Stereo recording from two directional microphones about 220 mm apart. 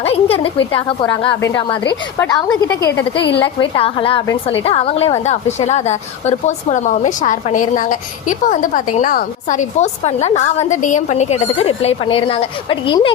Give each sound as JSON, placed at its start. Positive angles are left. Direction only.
{"t": 0.0, "sound": "a woman's voice", "side_deg": 25}
{"t": 3.4, "sound": "a woman's voice", "side_deg": 25}